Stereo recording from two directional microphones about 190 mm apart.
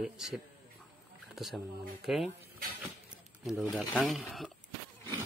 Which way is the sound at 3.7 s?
Centre (ahead or behind).